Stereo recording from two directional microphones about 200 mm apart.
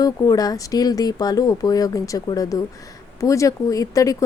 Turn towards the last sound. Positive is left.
turn(degrees=15)  # may be behind; listen again after turning